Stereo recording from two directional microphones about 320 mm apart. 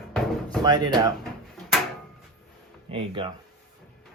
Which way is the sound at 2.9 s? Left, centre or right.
Centre.